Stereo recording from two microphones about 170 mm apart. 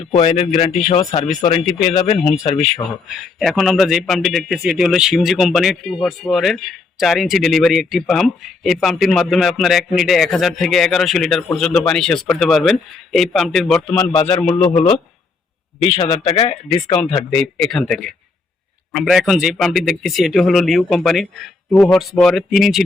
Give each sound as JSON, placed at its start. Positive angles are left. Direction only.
{"t": 0.5, "sound": "a man's voice", "side_deg": 0}
{"t": 0.9, "sound": "speech", "side_deg": 35}
{"t": 1.5, "sound": "a man's voice", "side_deg": 0}
{"t": 16.3, "sound": "speech", "side_deg": 20}
{"t": 16.9, "sound": "a man's voice", "side_deg": 0}